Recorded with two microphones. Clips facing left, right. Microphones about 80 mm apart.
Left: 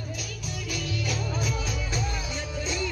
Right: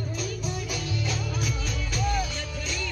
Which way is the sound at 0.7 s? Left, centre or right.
Right.